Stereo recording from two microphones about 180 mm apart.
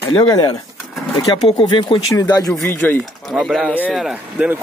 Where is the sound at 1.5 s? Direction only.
25° left (ahead or behind).